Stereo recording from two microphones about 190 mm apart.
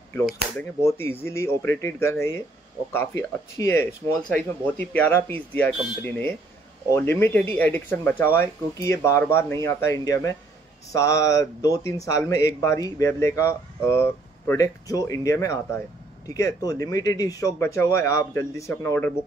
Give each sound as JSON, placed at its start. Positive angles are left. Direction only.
{"t": 0.6, "sound": "speech", "side_deg": 10}